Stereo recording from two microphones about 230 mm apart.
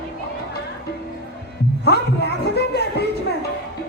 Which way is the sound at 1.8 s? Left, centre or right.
Left.